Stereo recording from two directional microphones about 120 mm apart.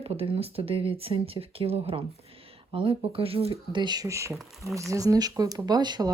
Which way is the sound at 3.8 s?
35° right (ahead or behind).